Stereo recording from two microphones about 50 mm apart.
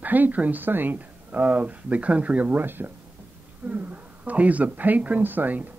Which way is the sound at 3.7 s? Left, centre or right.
Right.